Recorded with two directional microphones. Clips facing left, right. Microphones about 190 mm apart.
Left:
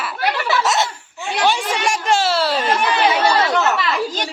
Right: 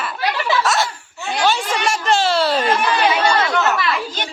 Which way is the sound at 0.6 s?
20° left (ahead or behind).